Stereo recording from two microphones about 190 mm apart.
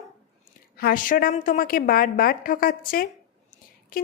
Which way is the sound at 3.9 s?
50° left (ahead or behind).